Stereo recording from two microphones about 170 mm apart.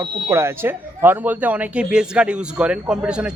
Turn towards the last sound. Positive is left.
turn(degrees=-5)  # may be behind; listen again after turning